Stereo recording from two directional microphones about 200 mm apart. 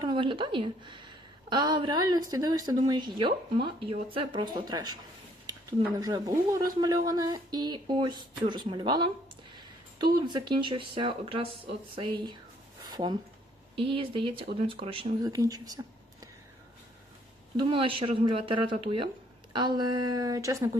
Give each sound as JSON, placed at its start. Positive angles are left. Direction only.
{"t": 0.0, "sound": "a woman's voice", "side_deg": -25}
{"t": 6.0, "sound": "speech", "side_deg": -20}
{"t": 10.2, "sound": "speech", "side_deg": -20}
{"t": 12.8, "sound": "a sound", "side_deg": -20}
{"t": 13.7, "sound": "speech", "side_deg": -25}
{"t": 17.6, "sound": "speech", "side_deg": -25}